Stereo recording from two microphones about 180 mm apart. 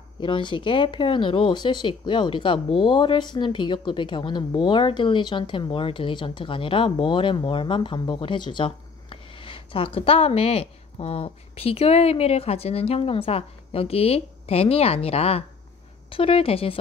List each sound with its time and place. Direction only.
0.2 s a woman's voice: 25° left (ahead or behind)